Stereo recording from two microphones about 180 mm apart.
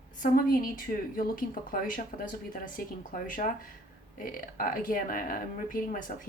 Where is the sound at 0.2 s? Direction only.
50° left (ahead or behind).